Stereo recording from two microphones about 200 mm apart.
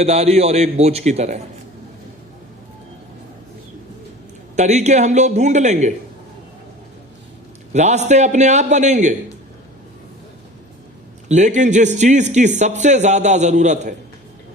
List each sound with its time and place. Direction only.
0.0 s a man's voice: 30° right (ahead or behind)
4.5 s a man's voice: 35° right (ahead or behind)
7.7 s a man's voice: 35° right (ahead or behind)
11.3 s a man's voice: 35° right (ahead or behind)